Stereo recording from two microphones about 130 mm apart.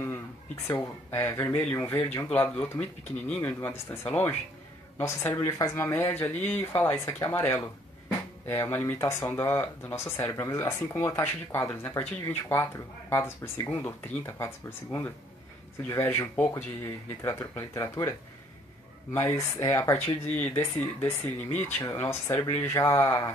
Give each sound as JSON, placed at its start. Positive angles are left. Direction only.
{"t": 0.7, "sound": "speech", "side_deg": 20}
{"t": 19.1, "sound": "speech", "side_deg": 20}